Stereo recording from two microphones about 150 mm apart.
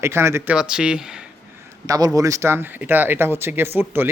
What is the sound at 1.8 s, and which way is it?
Speech, 25° right (ahead or behind).